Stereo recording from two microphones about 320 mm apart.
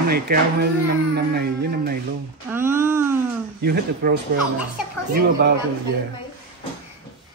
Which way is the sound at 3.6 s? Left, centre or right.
Right.